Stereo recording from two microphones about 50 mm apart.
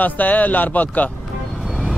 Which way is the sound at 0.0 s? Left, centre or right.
Left.